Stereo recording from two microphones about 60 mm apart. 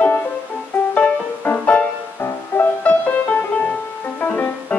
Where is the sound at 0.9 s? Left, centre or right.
Left.